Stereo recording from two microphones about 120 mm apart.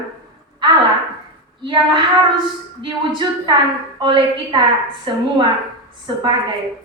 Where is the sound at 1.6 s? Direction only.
40° right (ahead or behind).